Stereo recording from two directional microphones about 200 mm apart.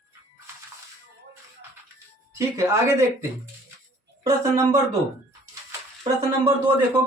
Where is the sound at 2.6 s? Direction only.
15° right (ahead or behind).